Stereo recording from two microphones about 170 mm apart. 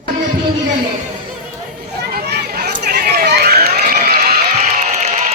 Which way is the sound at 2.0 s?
70° right (ahead or behind).